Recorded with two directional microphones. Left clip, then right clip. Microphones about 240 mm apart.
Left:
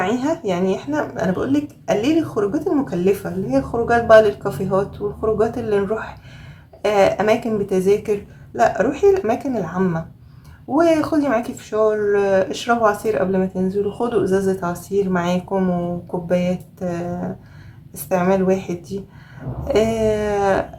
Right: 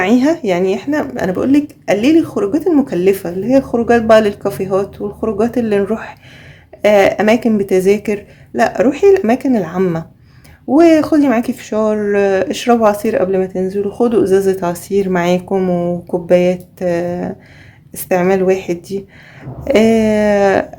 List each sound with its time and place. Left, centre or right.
0.0 s speech: right